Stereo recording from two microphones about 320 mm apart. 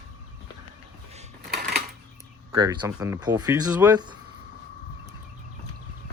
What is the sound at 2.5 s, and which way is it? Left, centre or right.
Speech, centre.